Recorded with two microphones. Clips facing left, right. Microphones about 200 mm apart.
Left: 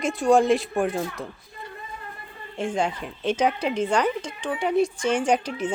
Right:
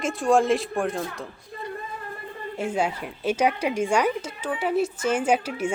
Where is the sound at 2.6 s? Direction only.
5° right (ahead or behind).